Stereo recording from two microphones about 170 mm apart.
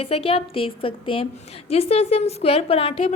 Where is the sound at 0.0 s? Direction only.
35° left (ahead or behind).